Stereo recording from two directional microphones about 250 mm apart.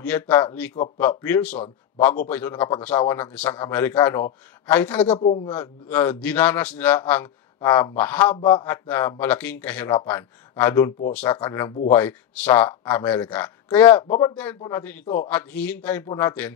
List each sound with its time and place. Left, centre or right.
0.0 s a man's voice: centre
5.2 s a man's voice: left
5.5 s a man's voice: centre